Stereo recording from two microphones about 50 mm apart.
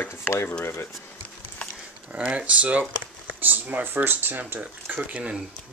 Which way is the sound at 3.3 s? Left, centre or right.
Right.